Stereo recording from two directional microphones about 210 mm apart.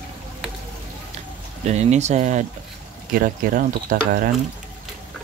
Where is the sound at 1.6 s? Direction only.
35° right (ahead or behind).